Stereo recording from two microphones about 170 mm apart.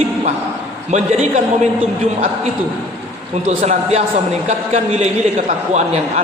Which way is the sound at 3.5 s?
40° right (ahead or behind).